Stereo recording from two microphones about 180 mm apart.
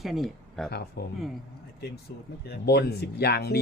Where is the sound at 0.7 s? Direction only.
60° left (ahead or behind).